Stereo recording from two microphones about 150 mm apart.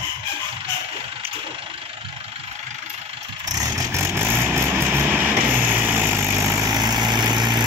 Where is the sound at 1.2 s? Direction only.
15° right (ahead or behind).